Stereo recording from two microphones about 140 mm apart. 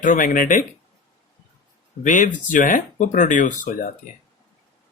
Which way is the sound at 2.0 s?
70° left (ahead or behind).